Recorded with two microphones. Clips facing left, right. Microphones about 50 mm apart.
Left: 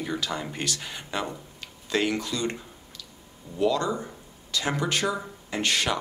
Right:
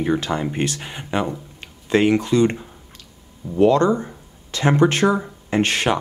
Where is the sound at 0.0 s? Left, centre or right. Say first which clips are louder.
Right 9 dB; right.